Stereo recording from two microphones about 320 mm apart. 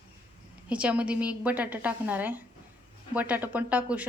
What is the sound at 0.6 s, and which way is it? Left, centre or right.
A woman's voice, centre.